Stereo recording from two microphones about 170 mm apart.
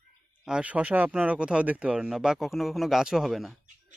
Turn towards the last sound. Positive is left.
turn(degrees=0)  # may be behind; listen again after turning